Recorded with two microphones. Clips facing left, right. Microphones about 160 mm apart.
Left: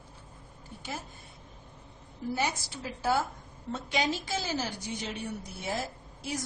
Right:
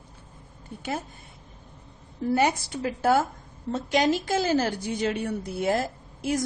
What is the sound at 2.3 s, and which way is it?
Speech, 60° right (ahead or behind).